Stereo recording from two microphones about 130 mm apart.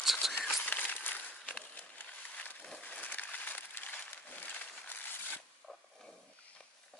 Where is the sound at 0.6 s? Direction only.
10° left (ahead or behind).